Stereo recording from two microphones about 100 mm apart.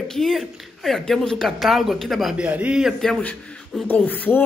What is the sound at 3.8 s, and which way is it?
Beatboxing, 15° left (ahead or behind).